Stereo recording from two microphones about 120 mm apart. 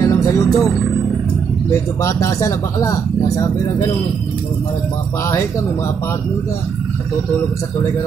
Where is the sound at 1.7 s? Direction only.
25° left (ahead or behind).